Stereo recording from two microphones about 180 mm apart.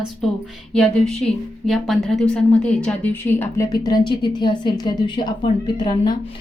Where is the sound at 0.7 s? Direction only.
Centre (ahead or behind).